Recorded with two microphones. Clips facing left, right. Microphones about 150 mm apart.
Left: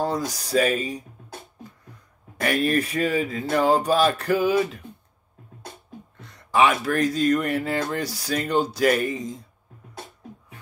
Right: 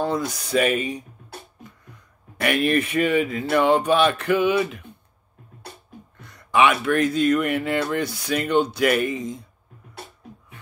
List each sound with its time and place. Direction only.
0.0 s speech: 35° left (ahead or behind)
2.4 s speech: 35° left (ahead or behind)
6.2 s speech: 35° left (ahead or behind)